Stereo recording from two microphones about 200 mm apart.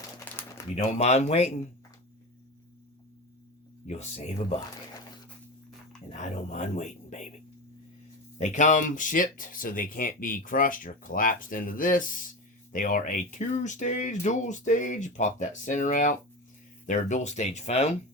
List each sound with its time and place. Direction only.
0.8 s speech: 35° left (ahead or behind)
3.8 s speech: 35° left (ahead or behind)
6.1 s speech: 35° left (ahead or behind)
8.4 s speech: 40° left (ahead or behind)